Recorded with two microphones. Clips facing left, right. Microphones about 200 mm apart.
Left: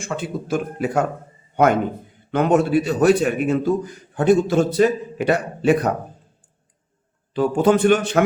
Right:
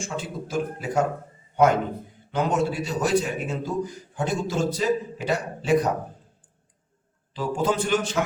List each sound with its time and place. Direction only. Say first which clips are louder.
0.0 s a man's voice: left 5 dB; 60° left (ahead or behind)
2.3 s a man's voice: left 7 dB; 60° left (ahead or behind)
7.3 s a man's voice: left 8 dB; 60° left (ahead or behind)